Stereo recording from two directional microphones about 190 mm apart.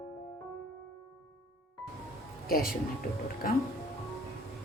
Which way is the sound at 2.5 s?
50° left (ahead or behind).